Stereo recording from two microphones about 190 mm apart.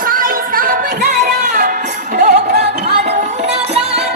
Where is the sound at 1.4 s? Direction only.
40° right (ahead or behind).